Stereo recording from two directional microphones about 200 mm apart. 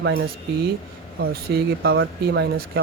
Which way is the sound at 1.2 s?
50° right (ahead or behind).